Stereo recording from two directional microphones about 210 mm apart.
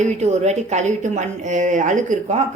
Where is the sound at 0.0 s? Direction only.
30° right (ahead or behind).